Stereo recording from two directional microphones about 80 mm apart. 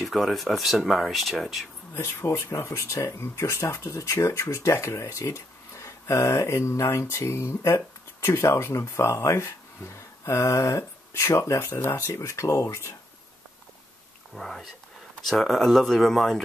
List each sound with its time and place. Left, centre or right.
0.0 s speech: centre
2.0 s speech: left
14.3 s speech: centre